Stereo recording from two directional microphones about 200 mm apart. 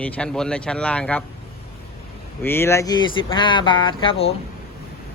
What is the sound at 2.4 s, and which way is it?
Speech, 10° left (ahead or behind).